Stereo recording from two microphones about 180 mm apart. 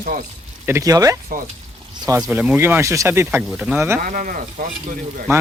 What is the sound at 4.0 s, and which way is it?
Speech, 50° right (ahead or behind).